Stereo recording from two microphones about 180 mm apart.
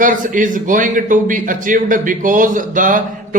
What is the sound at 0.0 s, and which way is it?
Speech, 45° right (ahead or behind).